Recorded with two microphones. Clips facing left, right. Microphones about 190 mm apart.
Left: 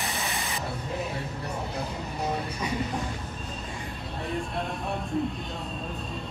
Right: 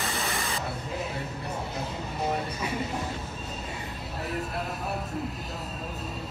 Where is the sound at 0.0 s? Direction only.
15° left (ahead or behind).